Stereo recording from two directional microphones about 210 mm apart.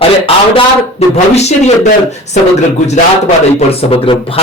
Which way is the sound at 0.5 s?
30° left (ahead or behind).